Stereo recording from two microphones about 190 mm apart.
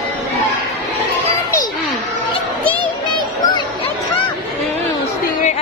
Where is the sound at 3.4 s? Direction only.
25° left (ahead or behind).